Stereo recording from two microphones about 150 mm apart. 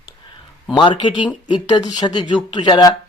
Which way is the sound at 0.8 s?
35° left (ahead or behind).